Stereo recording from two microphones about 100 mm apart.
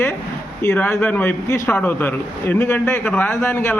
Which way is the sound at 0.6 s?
15° left (ahead or behind).